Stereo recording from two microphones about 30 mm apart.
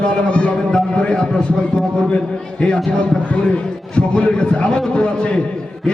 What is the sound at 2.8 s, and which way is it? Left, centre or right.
A man's voice, left.